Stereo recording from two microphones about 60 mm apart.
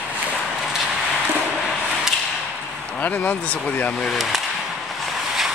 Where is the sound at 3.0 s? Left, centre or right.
Left.